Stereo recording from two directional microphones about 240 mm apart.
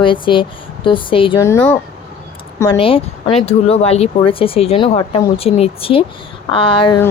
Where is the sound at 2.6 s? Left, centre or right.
Left.